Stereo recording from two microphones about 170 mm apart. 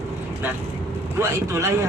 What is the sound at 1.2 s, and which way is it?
Speech, 15° right (ahead or behind).